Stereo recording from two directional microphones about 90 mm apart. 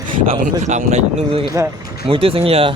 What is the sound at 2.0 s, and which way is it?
Speech, 90° right.